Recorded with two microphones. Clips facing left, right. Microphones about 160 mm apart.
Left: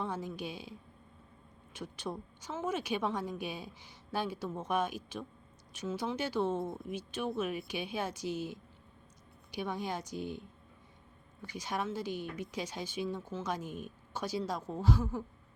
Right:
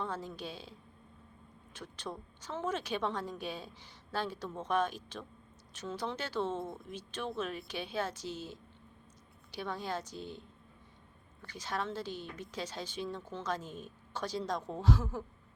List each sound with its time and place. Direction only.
0.0 s speech: 15° left (ahead or behind)
11.4 s speech: 10° left (ahead or behind)